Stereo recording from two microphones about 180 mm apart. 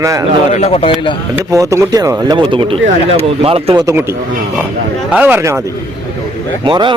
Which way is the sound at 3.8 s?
15° right (ahead or behind).